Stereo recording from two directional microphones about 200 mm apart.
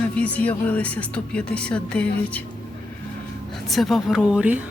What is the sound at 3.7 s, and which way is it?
Speech, centre (ahead or behind).